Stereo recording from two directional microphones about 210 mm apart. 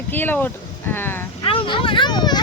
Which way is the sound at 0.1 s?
10° left (ahead or behind).